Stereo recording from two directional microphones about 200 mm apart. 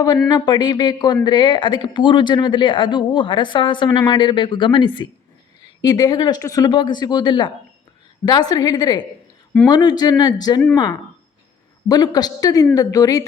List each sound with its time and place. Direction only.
0.3 s speech: 20° left (ahead or behind)
11.9 s a woman's voice: 20° left (ahead or behind)